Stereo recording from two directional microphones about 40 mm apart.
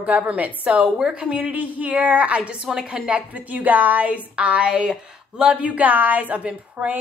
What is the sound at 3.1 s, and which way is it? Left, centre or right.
A woman's voice, right.